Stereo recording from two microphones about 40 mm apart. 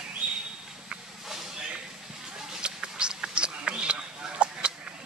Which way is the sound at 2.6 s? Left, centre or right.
Right.